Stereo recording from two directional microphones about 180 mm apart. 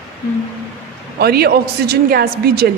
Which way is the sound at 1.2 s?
60° right (ahead or behind).